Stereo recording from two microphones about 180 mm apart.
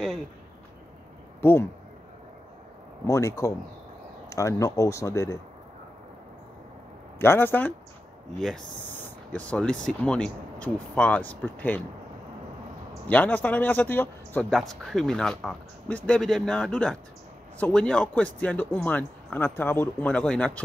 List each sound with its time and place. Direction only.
1.4 s speech: 10° left (ahead or behind)
3.1 s speech: 15° left (ahead or behind)
7.2 s speech: 15° left (ahead or behind)
13.1 s speech: 10° left (ahead or behind)